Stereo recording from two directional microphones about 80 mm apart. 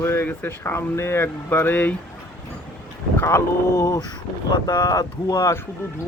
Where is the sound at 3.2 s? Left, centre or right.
Left.